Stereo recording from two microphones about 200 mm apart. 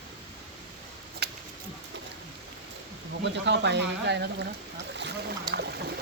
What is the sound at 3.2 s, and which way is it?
Speech, 60° right (ahead or behind).